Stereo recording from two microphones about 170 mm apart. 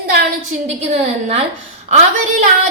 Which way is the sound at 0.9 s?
40° right (ahead or behind).